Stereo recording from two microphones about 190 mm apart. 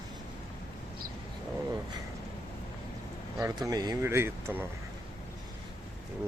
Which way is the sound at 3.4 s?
15° right (ahead or behind).